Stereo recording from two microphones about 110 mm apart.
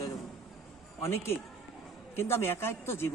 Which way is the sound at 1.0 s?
25° left (ahead or behind).